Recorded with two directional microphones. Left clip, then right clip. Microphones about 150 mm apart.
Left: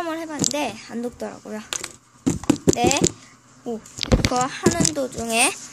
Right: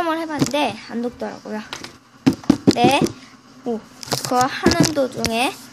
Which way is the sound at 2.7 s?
Centre (ahead or behind).